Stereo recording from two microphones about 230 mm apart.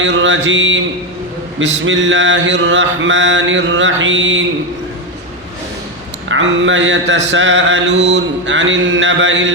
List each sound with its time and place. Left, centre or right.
0.0 s mantra: right
6.2 s speech: right
7.3 s mantra: right